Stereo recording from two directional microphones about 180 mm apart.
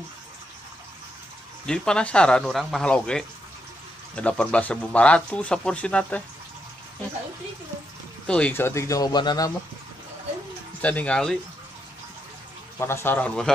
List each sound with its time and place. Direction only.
1.7 s speech: 5° left (ahead or behind)
8.3 s speech: 5° left (ahead or behind); by 9.5 s 25° left (ahead or behind)
10.8 s speech: 5° left (ahead or behind)
12.7 s speech: 15° left (ahead or behind)